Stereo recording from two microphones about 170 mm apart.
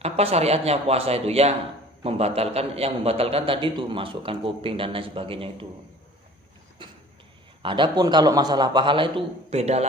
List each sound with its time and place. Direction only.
0.0 s a man's voice: 40° right (ahead or behind)
6.8 s a sound: 30° right (ahead or behind)
7.6 s a man's voice: 30° right (ahead or behind)